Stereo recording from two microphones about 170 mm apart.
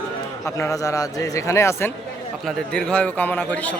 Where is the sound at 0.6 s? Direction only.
20° left (ahead or behind).